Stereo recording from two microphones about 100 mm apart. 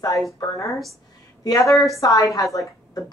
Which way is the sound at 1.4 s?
35° left (ahead or behind).